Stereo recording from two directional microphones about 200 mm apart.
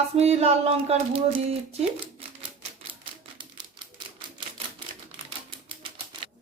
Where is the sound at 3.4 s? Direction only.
25° right (ahead or behind).